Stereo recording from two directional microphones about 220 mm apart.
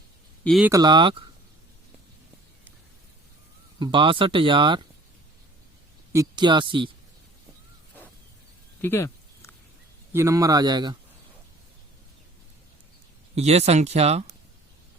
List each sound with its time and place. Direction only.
0.4 s speech: centre (ahead or behind)
0.7 s speech: 20° right (ahead or behind)
3.8 s speech: 25° right (ahead or behind)
6.1 s speech: 20° right (ahead or behind)
8.8 s a sound: 10° left (ahead or behind)
10.1 s speech: 15° right (ahead or behind)
13.3 s speech: 30° right (ahead or behind)